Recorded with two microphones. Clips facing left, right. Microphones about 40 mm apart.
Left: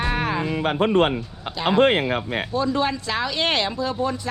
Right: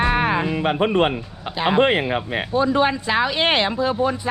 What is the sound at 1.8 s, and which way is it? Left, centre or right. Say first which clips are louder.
Speech: even; right.